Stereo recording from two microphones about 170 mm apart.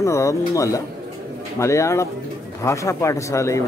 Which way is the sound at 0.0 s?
15° left (ahead or behind).